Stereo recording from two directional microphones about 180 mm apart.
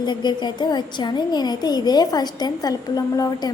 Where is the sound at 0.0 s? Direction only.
25° left (ahead or behind).